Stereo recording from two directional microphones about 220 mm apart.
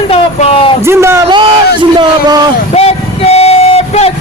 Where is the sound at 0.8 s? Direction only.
10° right (ahead or behind).